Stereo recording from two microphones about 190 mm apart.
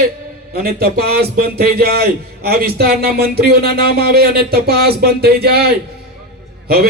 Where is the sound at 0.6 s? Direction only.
55° right (ahead or behind).